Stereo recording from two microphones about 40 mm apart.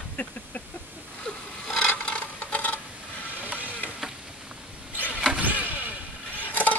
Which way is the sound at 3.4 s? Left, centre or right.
Right.